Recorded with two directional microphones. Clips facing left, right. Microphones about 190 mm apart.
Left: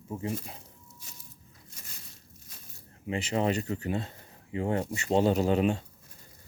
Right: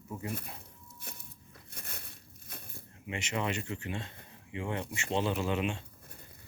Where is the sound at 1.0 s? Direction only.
60° right (ahead or behind).